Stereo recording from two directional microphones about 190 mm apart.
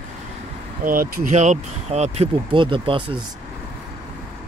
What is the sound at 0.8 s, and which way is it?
Speech, 50° right (ahead or behind).